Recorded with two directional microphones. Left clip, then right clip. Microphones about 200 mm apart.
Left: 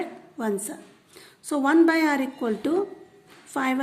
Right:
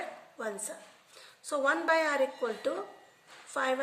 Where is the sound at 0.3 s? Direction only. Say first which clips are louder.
Left 10 dB; 45° left (ahead or behind).